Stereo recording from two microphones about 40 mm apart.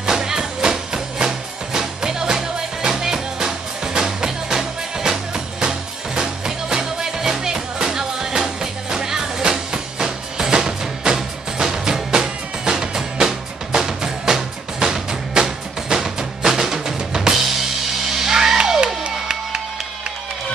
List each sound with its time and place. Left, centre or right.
0.0 s music: centre
19.0 s music: right